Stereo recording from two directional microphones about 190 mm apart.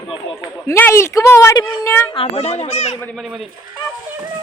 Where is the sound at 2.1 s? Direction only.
35° left (ahead or behind).